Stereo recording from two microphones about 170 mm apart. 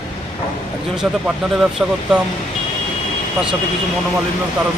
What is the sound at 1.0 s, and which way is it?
Speech, centre (ahead or behind).